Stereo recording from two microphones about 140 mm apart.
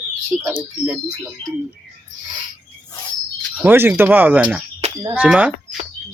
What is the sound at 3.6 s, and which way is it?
Speech, 15° right (ahead or behind).